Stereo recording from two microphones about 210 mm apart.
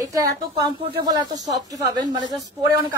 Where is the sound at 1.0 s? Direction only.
20° right (ahead or behind).